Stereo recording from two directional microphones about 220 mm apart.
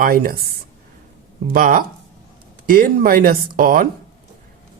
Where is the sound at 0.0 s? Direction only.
40° right (ahead or behind).